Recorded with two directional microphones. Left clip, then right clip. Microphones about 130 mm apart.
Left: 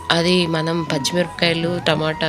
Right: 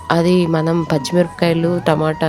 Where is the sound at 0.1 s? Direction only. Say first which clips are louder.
Right 2 dB; 35° right (ahead or behind).